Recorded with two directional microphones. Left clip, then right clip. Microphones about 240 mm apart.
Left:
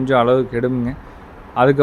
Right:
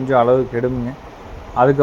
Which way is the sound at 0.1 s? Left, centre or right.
Centre.